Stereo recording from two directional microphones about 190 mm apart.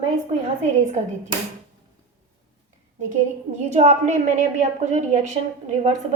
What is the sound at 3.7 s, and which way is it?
A woman's voice, 40° right (ahead or behind).